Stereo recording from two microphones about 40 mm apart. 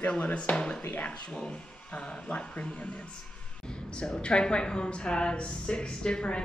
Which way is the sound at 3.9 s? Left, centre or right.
Left.